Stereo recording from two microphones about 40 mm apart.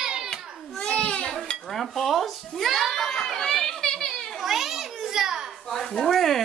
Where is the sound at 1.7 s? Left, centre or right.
Centre.